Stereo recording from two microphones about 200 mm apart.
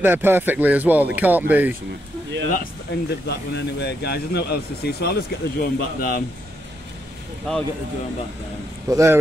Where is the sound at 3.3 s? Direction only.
60° left (ahead or behind).